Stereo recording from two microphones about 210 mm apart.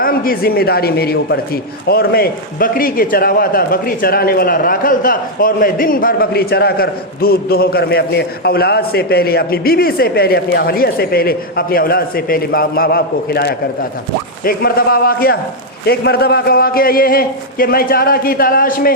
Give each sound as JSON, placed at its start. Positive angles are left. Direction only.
{"t": 0.0, "sound": "a man's voice", "side_deg": 45}